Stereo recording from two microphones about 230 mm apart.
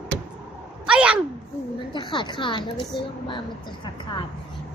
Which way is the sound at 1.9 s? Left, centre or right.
Centre.